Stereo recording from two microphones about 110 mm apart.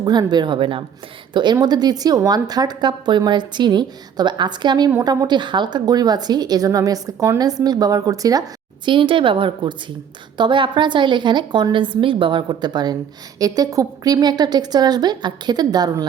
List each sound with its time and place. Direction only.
0.0 s a woman's voice: 40° right (ahead or behind)